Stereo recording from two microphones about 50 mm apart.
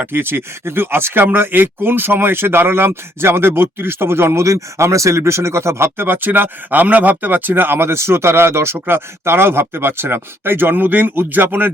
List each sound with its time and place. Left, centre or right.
0.0 s speech: right